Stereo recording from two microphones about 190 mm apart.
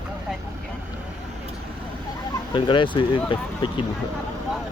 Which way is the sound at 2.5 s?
25° left (ahead or behind).